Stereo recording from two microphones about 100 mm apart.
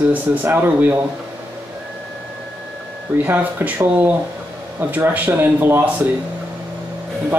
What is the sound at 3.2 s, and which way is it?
Speech, 20° right (ahead or behind).